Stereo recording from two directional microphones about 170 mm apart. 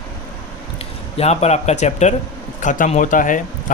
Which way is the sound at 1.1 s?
40° left (ahead or behind).